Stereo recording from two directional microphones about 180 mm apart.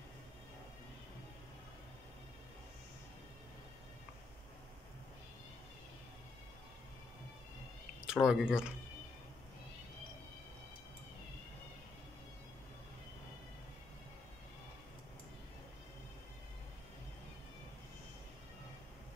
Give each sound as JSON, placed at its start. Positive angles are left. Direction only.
{"t": 8.1, "sound": "speech", "side_deg": -5}